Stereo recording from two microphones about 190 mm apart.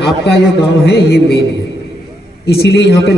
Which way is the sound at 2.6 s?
65° left (ahead or behind).